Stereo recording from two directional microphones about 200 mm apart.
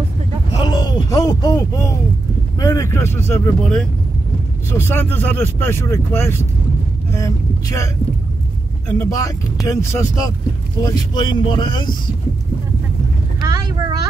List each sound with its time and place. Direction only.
0.7 s speech: 20° left (ahead or behind)
13.4 s vehicle: 20° right (ahead or behind)